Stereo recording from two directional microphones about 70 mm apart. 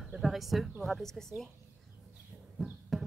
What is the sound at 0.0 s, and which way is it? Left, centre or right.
Speech, centre.